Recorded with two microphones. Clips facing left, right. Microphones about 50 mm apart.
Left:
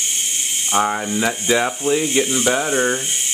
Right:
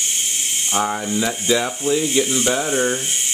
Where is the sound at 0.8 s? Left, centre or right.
Left.